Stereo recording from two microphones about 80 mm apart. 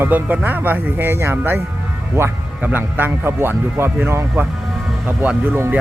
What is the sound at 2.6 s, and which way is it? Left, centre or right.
Speech, right.